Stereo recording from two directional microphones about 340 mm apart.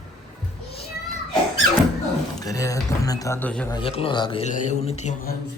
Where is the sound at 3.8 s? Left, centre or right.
Centre.